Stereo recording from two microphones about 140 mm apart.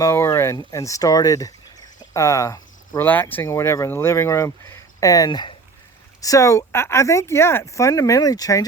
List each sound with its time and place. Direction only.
0.0 s speech: 20° left (ahead or behind)
3.1 s speech: 10° left (ahead or behind)